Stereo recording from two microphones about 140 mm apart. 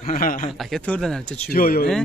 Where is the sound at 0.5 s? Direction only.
Centre (ahead or behind).